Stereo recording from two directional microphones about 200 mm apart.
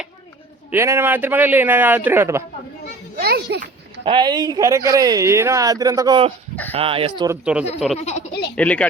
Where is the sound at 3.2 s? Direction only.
50° right (ahead or behind).